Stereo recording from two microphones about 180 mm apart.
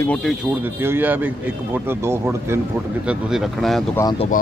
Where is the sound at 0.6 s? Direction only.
10° right (ahead or behind).